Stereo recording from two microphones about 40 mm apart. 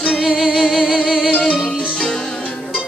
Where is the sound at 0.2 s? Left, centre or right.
Centre.